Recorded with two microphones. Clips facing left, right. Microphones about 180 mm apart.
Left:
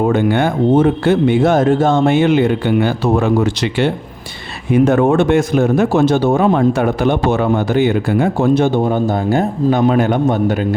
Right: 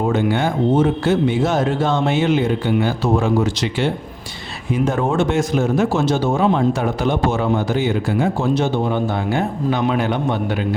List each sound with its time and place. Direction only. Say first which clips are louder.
0.1 s speech: left 4 dB; 55° left (ahead or behind)